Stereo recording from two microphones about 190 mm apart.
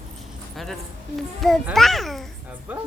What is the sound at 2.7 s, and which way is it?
Music, 10° right (ahead or behind).